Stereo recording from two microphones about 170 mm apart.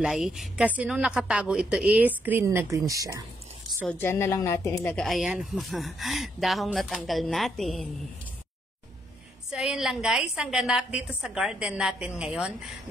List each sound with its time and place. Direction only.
0.0 s a woman's voice: 5° right (ahead or behind)
4.0 s speech: 15° left (ahead or behind)
4.9 s a woman's voice: centre (ahead or behind)
9.5 s a woman's voice: 5° right (ahead or behind)